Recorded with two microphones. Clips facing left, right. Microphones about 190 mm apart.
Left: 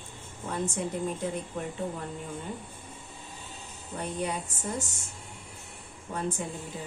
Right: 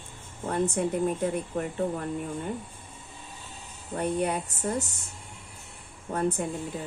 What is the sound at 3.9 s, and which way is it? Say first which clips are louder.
Speech: right 5 dB; 60° right (ahead or behind).